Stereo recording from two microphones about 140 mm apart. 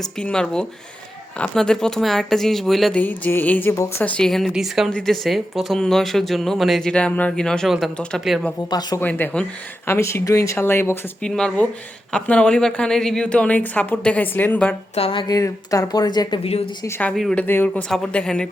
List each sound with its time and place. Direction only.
0.0 s speech: 5° left (ahead or behind)
3.0 s a woman's voice: 15° left (ahead or behind)
4.2 s speech: 5° left (ahead or behind)
9.0 s a woman's voice: 15° left (ahead or behind)
11.3 s a woman's voice: 5° left (ahead or behind)
14.9 s a woman's voice: 40° left (ahead or behind)
16.4 s a woman's voice: 45° left (ahead or behind)
16.8 s a woman's voice: 15° left (ahead or behind)
17.2 s speech: centre (ahead or behind)
17.4 s a woman's voice: 15° left (ahead or behind)